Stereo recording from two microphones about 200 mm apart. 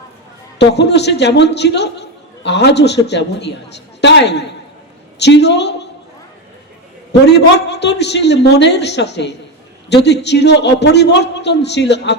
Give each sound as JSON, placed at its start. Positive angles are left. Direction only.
{"t": 0.6, "sound": "a man's voice", "side_deg": 60}
{"t": 7.1, "sound": "a man's voice", "side_deg": 60}